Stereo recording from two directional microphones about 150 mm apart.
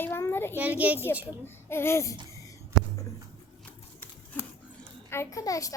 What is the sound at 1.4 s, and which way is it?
Speech, 15° left (ahead or behind).